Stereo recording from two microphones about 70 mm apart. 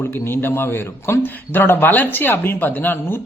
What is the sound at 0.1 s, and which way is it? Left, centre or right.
Speech, left.